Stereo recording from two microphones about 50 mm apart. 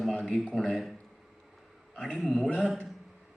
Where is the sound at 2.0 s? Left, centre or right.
Left.